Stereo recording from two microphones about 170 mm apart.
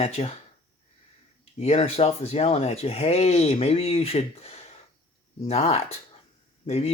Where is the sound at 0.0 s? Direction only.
40° left (ahead or behind).